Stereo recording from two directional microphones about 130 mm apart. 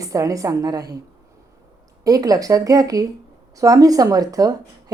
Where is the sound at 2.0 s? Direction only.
30° right (ahead or behind).